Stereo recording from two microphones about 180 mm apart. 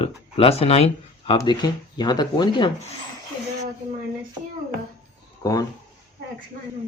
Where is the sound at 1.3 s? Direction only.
25° left (ahead or behind).